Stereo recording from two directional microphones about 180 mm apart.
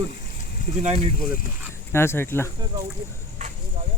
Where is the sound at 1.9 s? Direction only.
15° left (ahead or behind).